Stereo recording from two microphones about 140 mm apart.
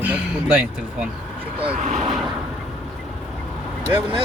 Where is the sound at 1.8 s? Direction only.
55° right (ahead or behind).